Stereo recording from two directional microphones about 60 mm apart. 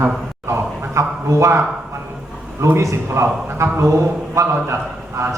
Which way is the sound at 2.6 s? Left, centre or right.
Right.